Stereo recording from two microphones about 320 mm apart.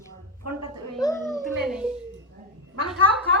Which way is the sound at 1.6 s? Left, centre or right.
Centre.